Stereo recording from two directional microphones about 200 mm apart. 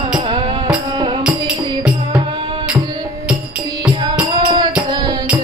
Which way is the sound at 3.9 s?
20° right (ahead or behind).